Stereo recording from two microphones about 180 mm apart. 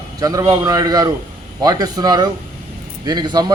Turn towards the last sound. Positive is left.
turn(degrees=-25)  # may be behind; listen again after turning